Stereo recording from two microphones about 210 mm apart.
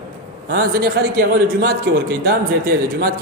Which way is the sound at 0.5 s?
45° right (ahead or behind).